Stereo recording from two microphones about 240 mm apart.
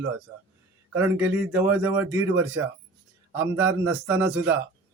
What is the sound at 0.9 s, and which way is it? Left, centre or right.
Speech, centre.